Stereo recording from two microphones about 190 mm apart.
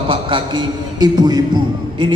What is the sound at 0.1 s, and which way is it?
A man's voice, 25° right (ahead or behind).